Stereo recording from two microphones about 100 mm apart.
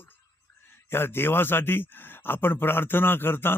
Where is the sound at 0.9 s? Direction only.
25° left (ahead or behind).